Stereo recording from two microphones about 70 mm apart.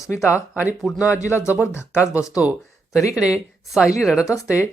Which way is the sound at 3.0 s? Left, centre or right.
Left.